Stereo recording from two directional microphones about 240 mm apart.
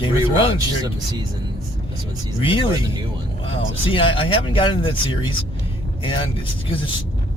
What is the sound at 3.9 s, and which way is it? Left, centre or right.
Speech, left.